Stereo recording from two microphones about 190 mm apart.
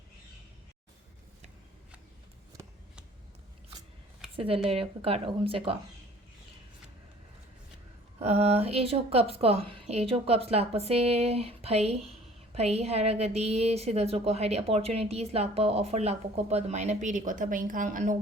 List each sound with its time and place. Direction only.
4.4 s speech: 30° right (ahead or behind)
8.2 s a woman's voice: 35° right (ahead or behind)